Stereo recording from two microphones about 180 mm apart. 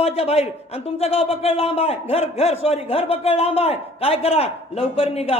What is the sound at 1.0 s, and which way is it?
A man's voice, 35° left (ahead or behind).